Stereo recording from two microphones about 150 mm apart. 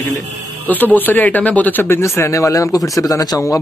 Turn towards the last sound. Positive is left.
turn(degrees=25)  # may be behind; listen again after turning